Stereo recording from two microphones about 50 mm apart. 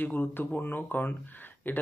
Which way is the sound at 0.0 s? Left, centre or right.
Left.